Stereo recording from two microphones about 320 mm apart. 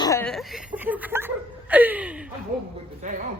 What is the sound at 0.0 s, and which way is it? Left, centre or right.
Chuckle, centre.